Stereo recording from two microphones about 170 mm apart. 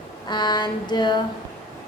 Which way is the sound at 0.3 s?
25° left (ahead or behind).